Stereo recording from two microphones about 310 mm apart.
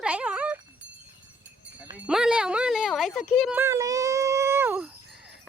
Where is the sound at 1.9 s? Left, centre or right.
Centre.